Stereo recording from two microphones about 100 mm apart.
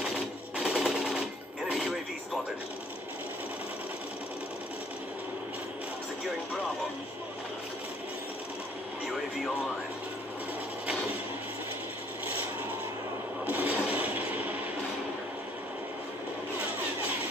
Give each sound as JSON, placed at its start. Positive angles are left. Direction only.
{"t": 0.0, "sound": "sewing machine", "side_deg": -5}
{"t": 1.7, "sound": "music", "side_deg": -5}
{"t": 13.5, "sound": "a sound", "side_deg": -15}